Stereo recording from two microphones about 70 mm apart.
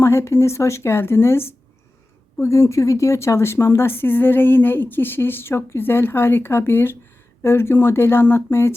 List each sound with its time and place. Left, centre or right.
0.0 s speech: left